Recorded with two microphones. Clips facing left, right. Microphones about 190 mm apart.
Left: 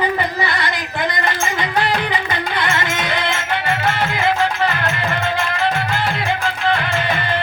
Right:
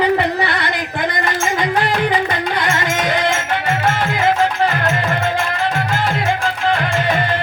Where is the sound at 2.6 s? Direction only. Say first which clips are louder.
Right 1 dB; 45° right (ahead or behind).